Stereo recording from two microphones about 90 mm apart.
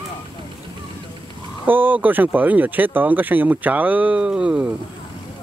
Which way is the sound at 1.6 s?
20° right (ahead or behind).